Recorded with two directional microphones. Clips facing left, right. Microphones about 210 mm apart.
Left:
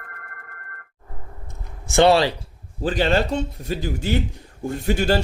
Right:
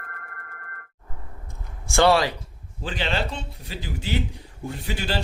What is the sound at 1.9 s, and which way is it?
Speech, 25° left (ahead or behind).